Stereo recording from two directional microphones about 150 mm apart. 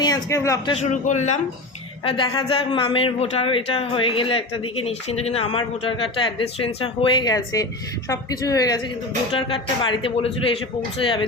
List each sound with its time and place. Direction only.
0.0 s speech: 25° left (ahead or behind)
0.8 s a man's voice: 50° left (ahead or behind)
2.0 s a man's voice: 35° left (ahead or behind)
9.5 s a man's voice: 35° left (ahead or behind)